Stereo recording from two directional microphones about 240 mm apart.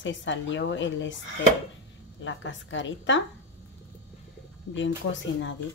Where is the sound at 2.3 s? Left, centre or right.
Left.